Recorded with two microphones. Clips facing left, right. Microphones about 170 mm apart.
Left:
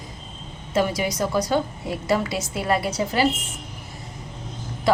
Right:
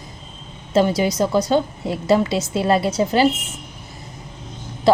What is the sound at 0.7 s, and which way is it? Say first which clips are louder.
A woman's voice: right 5 dB; 25° right (ahead or behind).